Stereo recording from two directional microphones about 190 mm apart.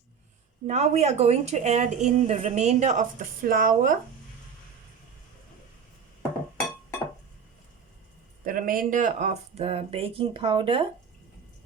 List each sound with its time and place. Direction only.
0.7 s a woman's voice: 35° right (ahead or behind)
8.4 s a woman's voice: 45° right (ahead or behind); by 10.8 s 30° right (ahead or behind)